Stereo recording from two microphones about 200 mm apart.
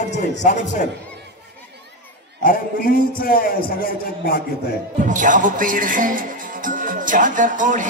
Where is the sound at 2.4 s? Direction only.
45° left (ahead or behind).